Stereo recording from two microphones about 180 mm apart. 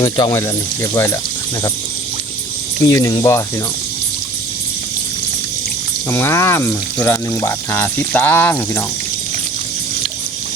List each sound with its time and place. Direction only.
0.0 s speech: 20° left (ahead or behind)
2.8 s speech: 20° left (ahead or behind)
6.1 s speech: 15° left (ahead or behind)